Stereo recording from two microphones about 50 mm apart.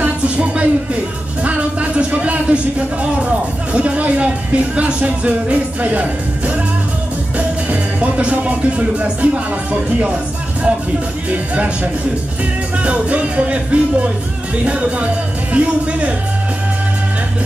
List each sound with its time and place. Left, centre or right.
0.0 s music: right
1.4 s speech: right
7.3 s music: right
11.2 s speech: right